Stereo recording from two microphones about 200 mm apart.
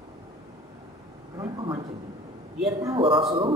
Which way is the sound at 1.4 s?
20° right (ahead or behind).